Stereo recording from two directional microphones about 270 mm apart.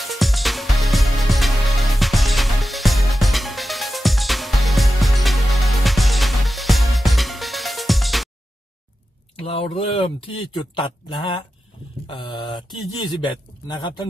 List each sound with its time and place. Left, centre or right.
0.0 s music: centre
9.5 s speech: centre